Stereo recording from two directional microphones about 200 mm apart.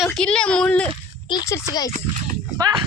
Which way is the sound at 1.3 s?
20° left (ahead or behind).